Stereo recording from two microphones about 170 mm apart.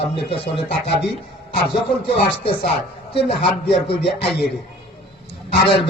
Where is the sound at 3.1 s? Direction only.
35° left (ahead or behind).